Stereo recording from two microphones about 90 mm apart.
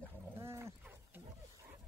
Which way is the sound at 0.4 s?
30° right (ahead or behind).